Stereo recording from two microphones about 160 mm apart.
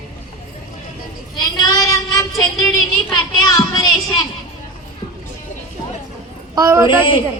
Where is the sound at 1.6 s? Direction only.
20° left (ahead or behind).